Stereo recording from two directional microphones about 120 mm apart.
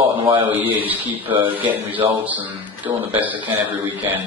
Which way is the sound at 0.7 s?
15° right (ahead or behind).